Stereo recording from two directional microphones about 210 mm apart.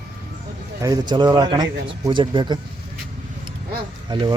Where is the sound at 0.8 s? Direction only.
20° right (ahead or behind).